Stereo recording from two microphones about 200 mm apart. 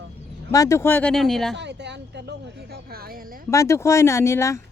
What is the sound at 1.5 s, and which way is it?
Speech, 60° right (ahead or behind).